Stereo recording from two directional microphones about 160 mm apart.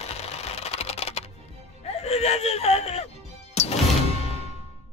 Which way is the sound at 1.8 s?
40° left (ahead or behind).